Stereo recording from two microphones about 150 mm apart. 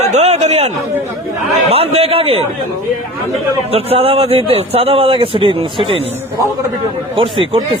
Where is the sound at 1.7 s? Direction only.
40° right (ahead or behind).